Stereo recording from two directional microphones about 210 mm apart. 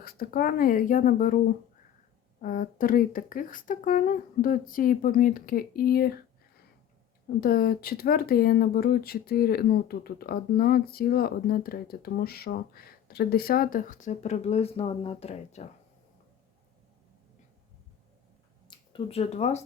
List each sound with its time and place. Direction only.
0.0 s speech: 45° left (ahead or behind)
2.4 s speech: 40° left (ahead or behind)
7.4 s speech: 45° left (ahead or behind); by 15.6 s 30° left (ahead or behind)
18.7 s speech: 25° left (ahead or behind)